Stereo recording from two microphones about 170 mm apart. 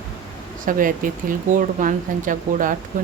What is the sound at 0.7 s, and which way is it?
Speech, 55° right (ahead or behind).